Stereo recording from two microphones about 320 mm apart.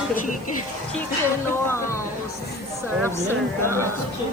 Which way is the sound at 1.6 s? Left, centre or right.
Centre.